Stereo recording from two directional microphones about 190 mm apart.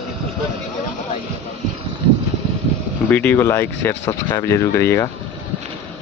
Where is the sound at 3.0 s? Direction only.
10° left (ahead or behind).